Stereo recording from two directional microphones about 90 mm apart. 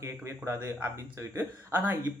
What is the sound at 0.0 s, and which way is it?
A man's voice, 30° right (ahead or behind).